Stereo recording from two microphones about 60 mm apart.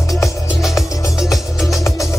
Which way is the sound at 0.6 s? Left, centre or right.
Centre.